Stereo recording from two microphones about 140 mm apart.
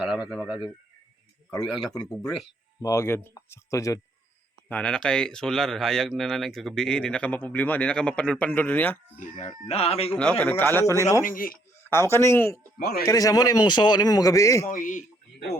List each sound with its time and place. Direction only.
0.0 s speech: 5° right (ahead or behind)
1.5 s a man's voice: 25° left (ahead or behind)
4.7 s speech: 5° left (ahead or behind)
9.6 s a man's voice: 45° left (ahead or behind)
10.2 s speech: 10° left (ahead or behind)
11.3 s speech: 80° left
11.8 s a man's voice: 15° left (ahead or behind)
14.7 s speech: 70° left (ahead or behind)